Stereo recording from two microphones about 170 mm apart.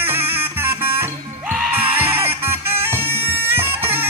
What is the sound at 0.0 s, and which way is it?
Music, 10° right (ahead or behind).